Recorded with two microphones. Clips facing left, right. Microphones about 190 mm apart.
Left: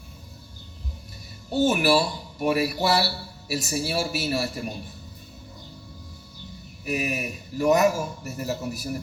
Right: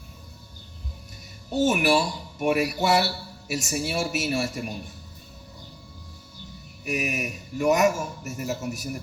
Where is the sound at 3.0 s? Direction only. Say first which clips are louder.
Even; 35° left (ahead or behind).